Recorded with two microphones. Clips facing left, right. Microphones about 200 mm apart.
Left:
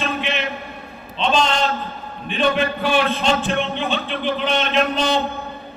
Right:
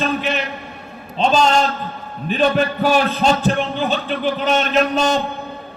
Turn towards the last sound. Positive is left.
turn(degrees=-45)  # may be behind; listen again after turning